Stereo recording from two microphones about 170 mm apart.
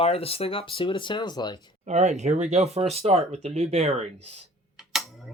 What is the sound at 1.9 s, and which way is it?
Speech, 40° right (ahead or behind).